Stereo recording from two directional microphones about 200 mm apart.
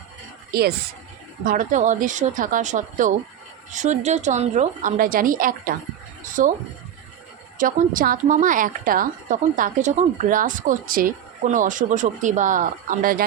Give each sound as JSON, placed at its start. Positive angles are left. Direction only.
{"t": 0.5, "sound": "a woman's voice", "side_deg": -50}
{"t": 7.6, "sound": "a woman's voice", "side_deg": -45}